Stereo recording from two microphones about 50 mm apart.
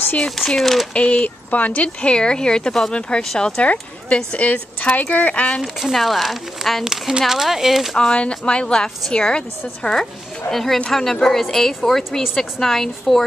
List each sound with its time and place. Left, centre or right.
0.6 s speech: centre
0.9 s speech: left
2.0 s speech: centre
4.1 s speech: left
5.6 s speech: centre
6.8 s speech: centre
8.1 s speech: left
10.5 s speech: centre